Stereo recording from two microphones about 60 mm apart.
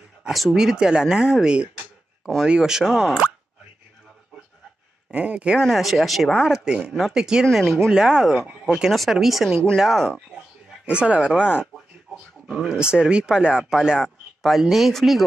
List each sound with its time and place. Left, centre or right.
0.3 s speech: centre
5.1 s speech: centre
5.6 s speech: centre
6.3 s speech: centre
6.9 s speech: centre
7.5 s speech: centre
7.9 s speech: centre
10.9 s speech: centre
11.6 s a sound: centre
12.6 s speech: centre